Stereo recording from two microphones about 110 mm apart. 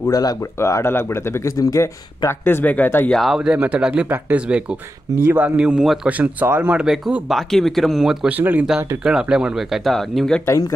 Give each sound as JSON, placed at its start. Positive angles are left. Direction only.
{"t": 0.0, "sound": "speech", "side_deg": 35}
{"t": 3.1, "sound": "speech", "side_deg": 0}
{"t": 8.3, "sound": "speech", "side_deg": -15}